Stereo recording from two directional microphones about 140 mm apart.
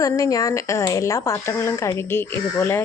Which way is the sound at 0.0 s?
25° left (ahead or behind).